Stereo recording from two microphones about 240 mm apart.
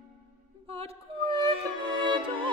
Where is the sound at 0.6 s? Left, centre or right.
Right.